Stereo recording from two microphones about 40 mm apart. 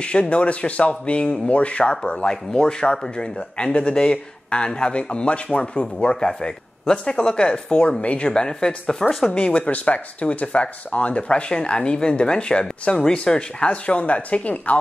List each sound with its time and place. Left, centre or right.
0.0 s speech: left
8.3 s speech: left
9.3 s speech: left